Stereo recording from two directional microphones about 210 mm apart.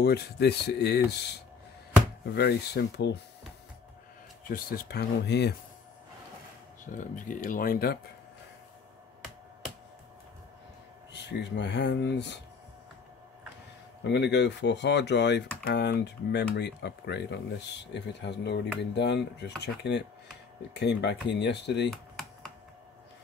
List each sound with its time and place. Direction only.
0.0 s speech: 50° left (ahead or behind)
4.5 s speech: 45° left (ahead or behind)
7.0 s speech: 40° left (ahead or behind)
11.1 s speech: 55° left (ahead or behind)
14.0 s speech: 55° left (ahead or behind)
21.9 s computer keyboard: centre (ahead or behind)